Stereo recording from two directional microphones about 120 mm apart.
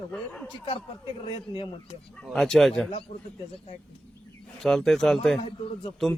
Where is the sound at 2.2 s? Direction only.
5° left (ahead or behind).